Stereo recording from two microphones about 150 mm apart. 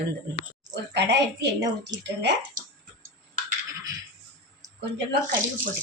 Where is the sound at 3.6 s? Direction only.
20° right (ahead or behind).